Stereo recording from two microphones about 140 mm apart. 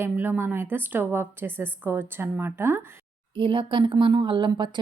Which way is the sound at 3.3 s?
35° right (ahead or behind).